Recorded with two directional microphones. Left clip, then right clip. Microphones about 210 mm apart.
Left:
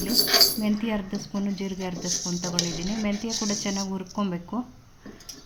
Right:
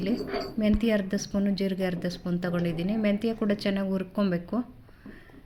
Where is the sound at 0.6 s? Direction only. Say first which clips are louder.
Right 3 dB; 5° right (ahead or behind).